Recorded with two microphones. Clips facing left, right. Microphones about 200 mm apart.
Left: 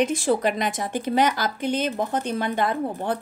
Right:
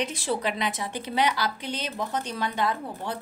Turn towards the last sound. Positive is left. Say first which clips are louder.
# left 5 dB
turn(degrees=55)  # may be behind; listen again after turning